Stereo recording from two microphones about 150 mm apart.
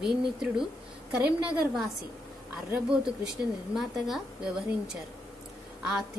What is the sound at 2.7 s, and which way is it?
A woman's voice, 5° right (ahead or behind).